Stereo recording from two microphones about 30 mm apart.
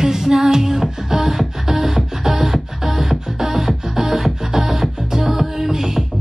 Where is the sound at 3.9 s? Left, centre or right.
Centre.